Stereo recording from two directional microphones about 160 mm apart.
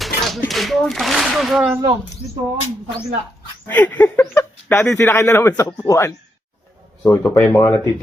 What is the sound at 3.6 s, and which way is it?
Speech, 10° left (ahead or behind).